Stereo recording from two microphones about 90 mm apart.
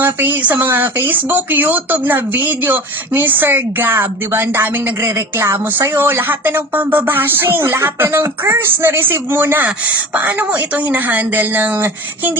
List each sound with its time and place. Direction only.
0.0 s speech: 20° right (ahead or behind)